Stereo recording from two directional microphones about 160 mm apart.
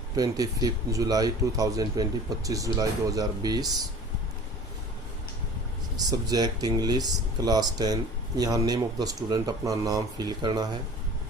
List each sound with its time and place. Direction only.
0.2 s speech: 25° right (ahead or behind)
6.1 s speech: 25° right (ahead or behind)